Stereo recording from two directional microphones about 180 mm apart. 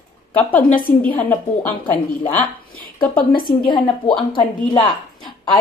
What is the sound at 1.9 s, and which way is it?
Speech, 10° left (ahead or behind).